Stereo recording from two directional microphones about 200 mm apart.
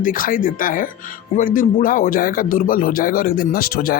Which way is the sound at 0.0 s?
45° left (ahead or behind).